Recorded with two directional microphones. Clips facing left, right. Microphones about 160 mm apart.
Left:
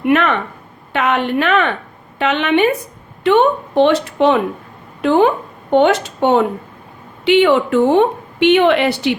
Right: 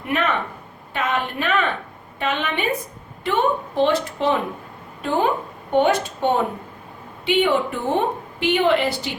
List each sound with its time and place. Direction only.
0.0 s a woman's voice: 75° left (ahead or behind)